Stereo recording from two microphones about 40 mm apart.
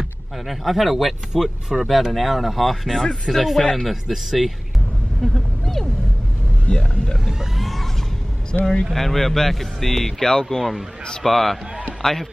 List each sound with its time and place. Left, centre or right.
0.5 s speech: centre
5.2 s a sound: centre
7.2 s speech: centre
7.6 s music: centre
8.5 s speech: centre
8.9 s speech: centre